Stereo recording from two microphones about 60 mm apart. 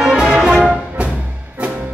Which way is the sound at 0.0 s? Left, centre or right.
Centre.